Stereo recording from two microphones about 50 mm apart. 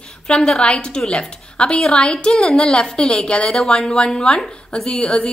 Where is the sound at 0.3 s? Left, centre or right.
Centre.